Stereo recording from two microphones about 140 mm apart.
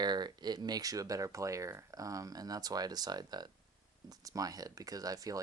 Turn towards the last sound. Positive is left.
turn(degrees=-25)  # may be behind; listen again after turning